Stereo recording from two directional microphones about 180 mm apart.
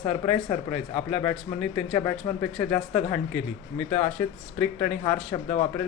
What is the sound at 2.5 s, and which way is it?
Speech, 5° left (ahead or behind).